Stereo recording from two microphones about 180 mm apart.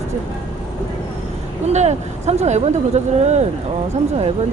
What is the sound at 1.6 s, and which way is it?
A woman's voice, 40° right (ahead or behind).